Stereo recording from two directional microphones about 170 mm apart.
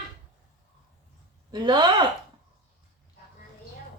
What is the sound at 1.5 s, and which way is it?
Speech, 25° right (ahead or behind).